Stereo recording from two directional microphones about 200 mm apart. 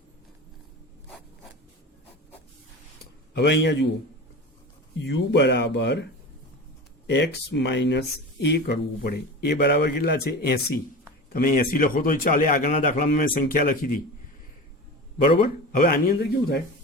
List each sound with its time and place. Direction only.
3.3 s speech: 60° left (ahead or behind)
4.9 s speech: 60° left (ahead or behind)
7.1 s a man's voice: 60° left (ahead or behind); by 14.0 s 45° left (ahead or behind)
15.4 s a man's voice: 45° left (ahead or behind)